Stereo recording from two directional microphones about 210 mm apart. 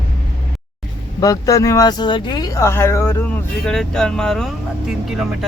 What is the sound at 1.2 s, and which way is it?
Speech, 15° left (ahead or behind).